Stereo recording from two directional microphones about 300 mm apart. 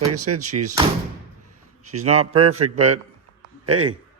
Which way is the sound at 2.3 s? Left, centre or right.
Right.